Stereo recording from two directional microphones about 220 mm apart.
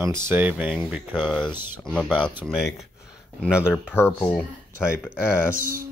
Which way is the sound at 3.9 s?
10° left (ahead or behind).